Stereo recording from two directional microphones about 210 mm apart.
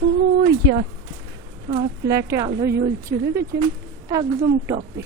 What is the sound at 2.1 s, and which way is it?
A woman's voice, 15° right (ahead or behind).